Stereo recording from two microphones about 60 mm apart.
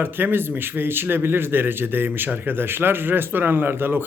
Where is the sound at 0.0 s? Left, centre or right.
Right.